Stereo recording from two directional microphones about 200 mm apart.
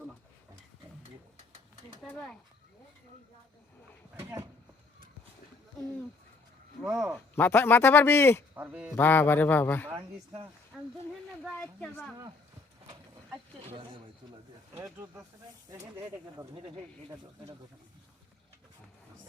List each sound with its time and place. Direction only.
2.0 s speech: centre (ahead or behind)
4.1 s speech: 15° right (ahead or behind)
6.8 s speech: centre (ahead or behind)
7.3 s a man's voice: 10° left (ahead or behind)
8.5 s speech: 10° right (ahead or behind)
9.0 s a man's voice: 10° left (ahead or behind)
10.7 s a sound: centre (ahead or behind)
11.4 s a man's voice: 5° left (ahead or behind)
15.7 s speech: 15° right (ahead or behind)
16.6 s speech: 25° right (ahead or behind)